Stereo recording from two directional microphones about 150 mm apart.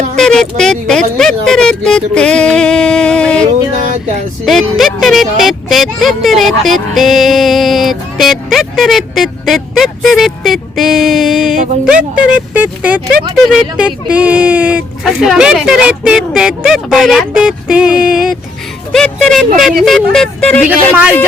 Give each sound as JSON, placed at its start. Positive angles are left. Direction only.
{"t": 0.2, "sound": "speech", "side_deg": 5}
{"t": 3.8, "sound": "a sound", "side_deg": -60}
{"t": 4.4, "sound": "speech", "side_deg": 0}
{"t": 20.7, "sound": "speech", "side_deg": -10}